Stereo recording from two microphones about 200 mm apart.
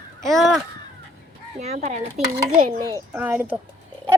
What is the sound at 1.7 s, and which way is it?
Speech, 35° right (ahead or behind).